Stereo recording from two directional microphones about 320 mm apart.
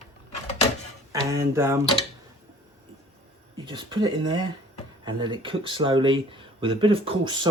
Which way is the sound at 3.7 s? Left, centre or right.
Centre.